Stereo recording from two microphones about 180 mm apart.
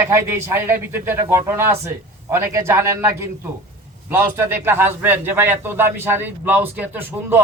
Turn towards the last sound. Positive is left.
turn(degrees=-10)  # may be behind; listen again after turning